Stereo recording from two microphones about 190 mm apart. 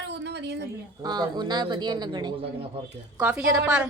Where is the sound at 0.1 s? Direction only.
65° right (ahead or behind).